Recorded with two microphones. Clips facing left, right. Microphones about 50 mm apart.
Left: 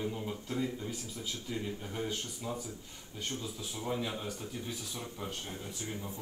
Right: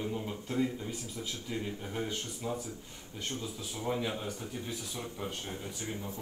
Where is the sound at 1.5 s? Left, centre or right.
Right.